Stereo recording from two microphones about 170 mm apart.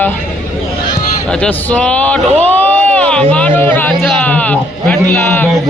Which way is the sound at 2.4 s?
10° left (ahead or behind).